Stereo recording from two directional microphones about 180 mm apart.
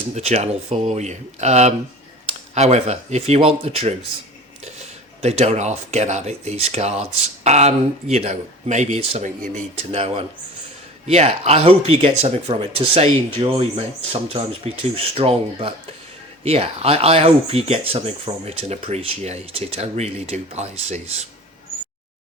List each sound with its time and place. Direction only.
0.1 s speech: 35° right (ahead or behind)
5.2 s speech: 35° right (ahead or behind)